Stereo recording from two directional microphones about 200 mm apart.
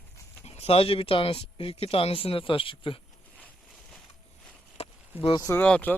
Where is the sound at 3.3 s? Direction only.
5° left (ahead or behind).